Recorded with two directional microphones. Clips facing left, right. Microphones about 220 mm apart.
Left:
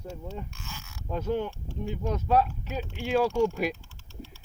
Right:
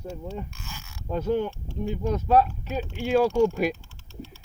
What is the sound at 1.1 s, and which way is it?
Speech, 40° right (ahead or behind).